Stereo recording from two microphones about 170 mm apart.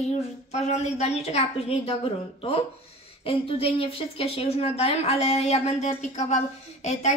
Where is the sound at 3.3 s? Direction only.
35° left (ahead or behind).